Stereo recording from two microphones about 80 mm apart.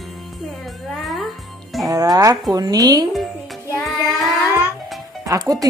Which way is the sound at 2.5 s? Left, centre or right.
Right.